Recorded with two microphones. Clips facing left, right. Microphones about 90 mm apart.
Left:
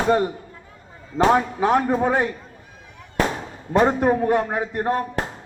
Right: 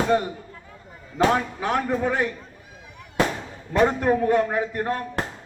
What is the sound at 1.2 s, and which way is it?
A man's voice, 25° left (ahead or behind).